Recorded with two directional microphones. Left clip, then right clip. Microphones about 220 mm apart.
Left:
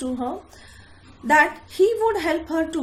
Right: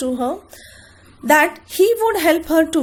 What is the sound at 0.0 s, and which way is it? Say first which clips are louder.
A woman's voice: right 6 dB; 45° right (ahead or behind).